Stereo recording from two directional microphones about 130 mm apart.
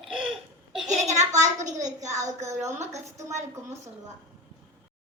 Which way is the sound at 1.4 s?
65° right (ahead or behind).